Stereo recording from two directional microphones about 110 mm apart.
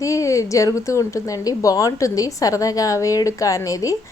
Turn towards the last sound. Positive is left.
turn(degrees=30)  # may be behind; listen again after turning